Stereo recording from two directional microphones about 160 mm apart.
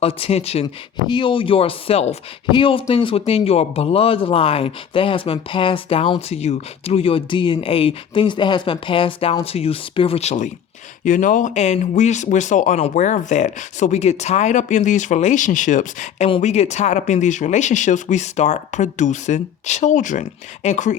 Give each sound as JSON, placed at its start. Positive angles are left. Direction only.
{"t": 0.0, "sound": "a man's voice", "side_deg": 40}
{"t": 1.0, "sound": "a man's voice", "side_deg": 30}